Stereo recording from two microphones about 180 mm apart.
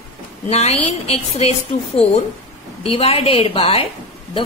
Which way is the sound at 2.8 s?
30° left (ahead or behind).